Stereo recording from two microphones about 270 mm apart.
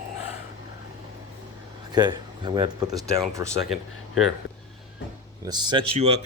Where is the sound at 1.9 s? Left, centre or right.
Centre.